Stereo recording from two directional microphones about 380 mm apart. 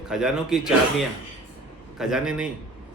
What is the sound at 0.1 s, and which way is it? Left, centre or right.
Speech, centre.